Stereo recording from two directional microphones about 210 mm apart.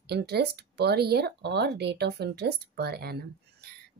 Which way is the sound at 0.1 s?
50° right (ahead or behind).